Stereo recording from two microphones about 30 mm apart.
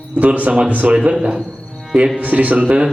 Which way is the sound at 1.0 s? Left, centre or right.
Right.